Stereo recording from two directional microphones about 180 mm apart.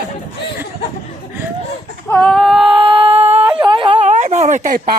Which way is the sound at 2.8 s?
30° right (ahead or behind).